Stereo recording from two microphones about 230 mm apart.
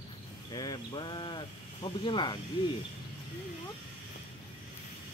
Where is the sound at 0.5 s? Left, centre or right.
Centre.